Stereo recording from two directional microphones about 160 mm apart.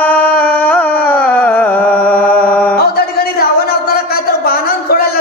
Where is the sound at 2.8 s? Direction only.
70° left (ahead or behind).